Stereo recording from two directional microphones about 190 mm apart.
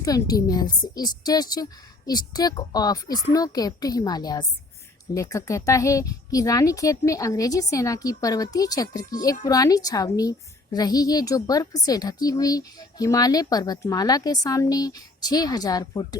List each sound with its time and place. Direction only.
0.0 s speech: 20° left (ahead or behind)